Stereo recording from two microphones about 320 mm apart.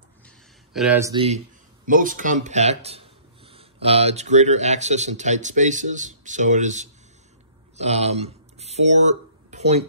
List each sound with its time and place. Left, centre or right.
0.7 s speech: centre; by 9.8 s right